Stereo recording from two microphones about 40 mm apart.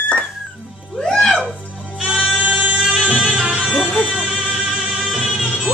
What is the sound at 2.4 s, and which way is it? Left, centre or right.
Music, right.